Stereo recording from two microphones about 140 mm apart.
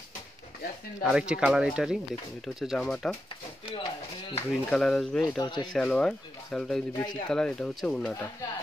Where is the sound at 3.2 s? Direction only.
35° left (ahead or behind).